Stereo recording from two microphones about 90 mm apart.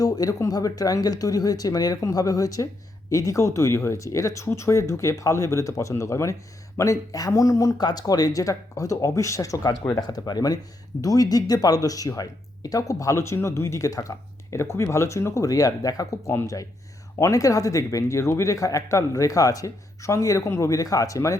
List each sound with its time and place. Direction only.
0.0 s speech: 40° left (ahead or behind)